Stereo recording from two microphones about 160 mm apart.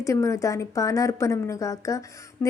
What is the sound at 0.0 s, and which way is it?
A woman's voice, 20° left (ahead or behind).